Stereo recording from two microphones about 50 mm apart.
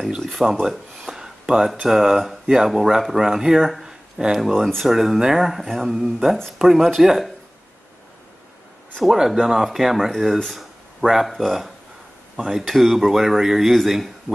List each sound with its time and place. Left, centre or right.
0.2 s speech: centre
0.7 s a sound: centre
1.9 s speech: centre
4.5 s speech: centre
4.8 s speech: centre
9.0 s speech: centre